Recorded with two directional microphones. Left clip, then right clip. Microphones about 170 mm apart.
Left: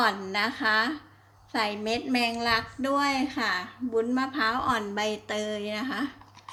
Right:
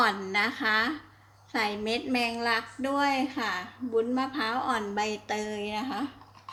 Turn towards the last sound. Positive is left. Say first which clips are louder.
# left 1 dB
turn(degrees=20)  # may be behind; listen again after turning